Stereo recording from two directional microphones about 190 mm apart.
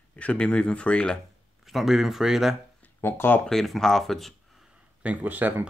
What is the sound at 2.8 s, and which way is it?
Speech, 10° left (ahead or behind).